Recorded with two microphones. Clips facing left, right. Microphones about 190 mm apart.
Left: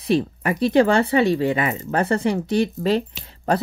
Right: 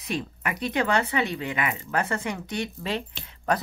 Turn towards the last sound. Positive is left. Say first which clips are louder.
# left 5 dB
turn(degrees=30)  # may be behind; listen again after turning